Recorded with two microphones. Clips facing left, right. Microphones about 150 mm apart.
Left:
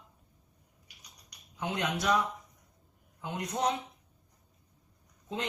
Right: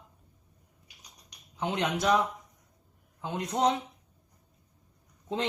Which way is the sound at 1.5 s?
25° right (ahead or behind).